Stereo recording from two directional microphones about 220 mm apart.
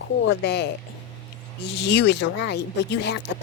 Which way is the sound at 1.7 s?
50° left (ahead or behind).